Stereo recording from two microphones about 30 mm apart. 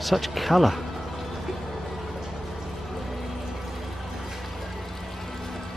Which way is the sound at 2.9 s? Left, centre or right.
Centre.